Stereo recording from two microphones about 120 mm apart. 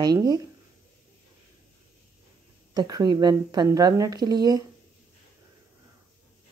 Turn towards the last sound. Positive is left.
turn(degrees=-35)  # may be behind; listen again after turning